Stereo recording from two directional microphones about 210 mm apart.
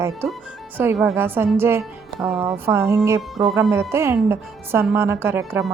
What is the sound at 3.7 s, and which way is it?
A woman's voice, 10° right (ahead or behind).